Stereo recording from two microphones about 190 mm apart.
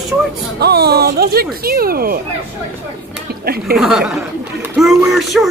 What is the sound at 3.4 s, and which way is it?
Speech, 55° right (ahead or behind).